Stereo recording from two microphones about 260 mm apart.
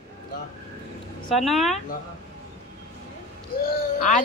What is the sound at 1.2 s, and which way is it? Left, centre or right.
Speech, centre.